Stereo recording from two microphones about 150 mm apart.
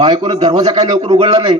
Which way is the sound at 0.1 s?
45° right (ahead or behind).